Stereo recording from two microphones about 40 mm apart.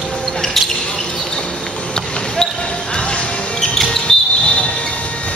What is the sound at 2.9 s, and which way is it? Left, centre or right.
Music, left.